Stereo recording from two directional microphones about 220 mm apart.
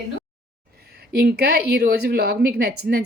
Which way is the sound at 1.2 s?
45° right (ahead or behind).